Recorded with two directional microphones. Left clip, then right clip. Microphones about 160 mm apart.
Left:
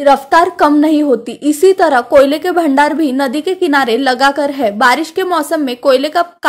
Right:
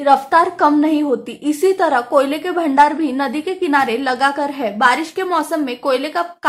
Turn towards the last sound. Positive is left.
turn(degrees=35)  # may be behind; listen again after turning